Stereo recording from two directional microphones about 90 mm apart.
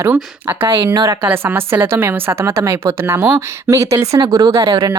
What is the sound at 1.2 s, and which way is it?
A woman's voice, 20° right (ahead or behind).